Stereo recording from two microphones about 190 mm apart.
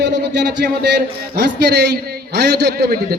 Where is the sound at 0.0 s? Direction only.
65° right (ahead or behind).